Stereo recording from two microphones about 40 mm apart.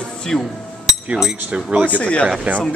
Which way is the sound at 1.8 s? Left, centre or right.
Left.